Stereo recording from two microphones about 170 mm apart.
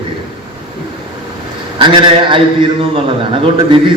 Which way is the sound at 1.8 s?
25° right (ahead or behind).